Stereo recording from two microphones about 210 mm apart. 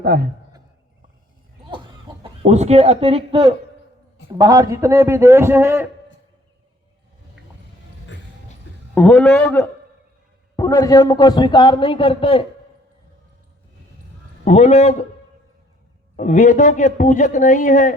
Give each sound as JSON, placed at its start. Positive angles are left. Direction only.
{"t": 0.0, "sound": "a man's voice", "side_deg": -45}
{"t": 1.7, "sound": "chicken", "side_deg": -20}
{"t": 4.3, "sound": "a man's voice", "side_deg": -15}
{"t": 9.0, "sound": "a man's voice", "side_deg": 5}
{"t": 14.4, "sound": "a man's voice", "side_deg": 30}
{"t": 16.1, "sound": "a man's voice", "side_deg": 35}